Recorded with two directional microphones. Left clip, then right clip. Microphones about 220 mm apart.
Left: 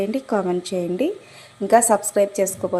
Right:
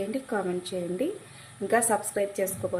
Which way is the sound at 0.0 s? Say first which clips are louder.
Left 8 dB; 25° left (ahead or behind).